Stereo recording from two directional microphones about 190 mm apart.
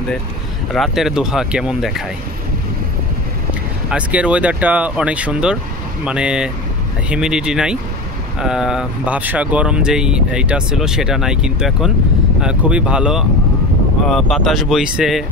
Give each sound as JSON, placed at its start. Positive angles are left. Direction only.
{"t": 0.7, "sound": "speech", "side_deg": 0}
{"t": 3.9, "sound": "speech", "side_deg": -5}